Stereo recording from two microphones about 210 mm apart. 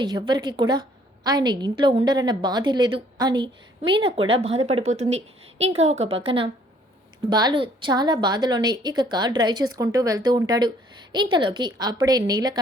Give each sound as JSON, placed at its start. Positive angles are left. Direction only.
{"t": 0.0, "sound": "a woman's voice", "side_deg": -20}